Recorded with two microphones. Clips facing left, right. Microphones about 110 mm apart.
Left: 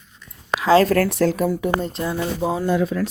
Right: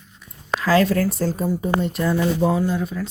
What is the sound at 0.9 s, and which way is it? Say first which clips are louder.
Speech: left 3 dB; 70° left (ahead or behind).